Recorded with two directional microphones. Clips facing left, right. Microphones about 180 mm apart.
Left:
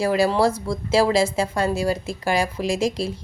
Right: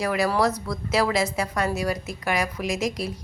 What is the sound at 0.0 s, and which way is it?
A woman's voice, 30° left (ahead or behind).